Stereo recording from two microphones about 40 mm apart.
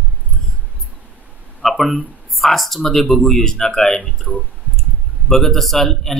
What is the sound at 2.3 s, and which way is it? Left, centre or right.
Speech, centre.